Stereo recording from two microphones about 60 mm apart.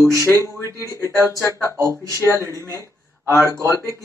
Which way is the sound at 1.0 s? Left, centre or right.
Left.